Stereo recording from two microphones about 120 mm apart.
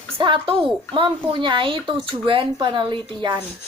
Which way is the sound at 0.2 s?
45° right (ahead or behind).